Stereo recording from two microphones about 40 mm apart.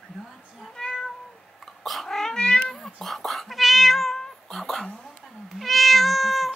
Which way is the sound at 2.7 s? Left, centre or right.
Centre.